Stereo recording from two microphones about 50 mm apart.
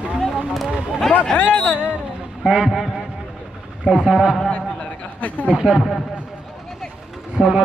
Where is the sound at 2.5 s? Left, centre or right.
Centre.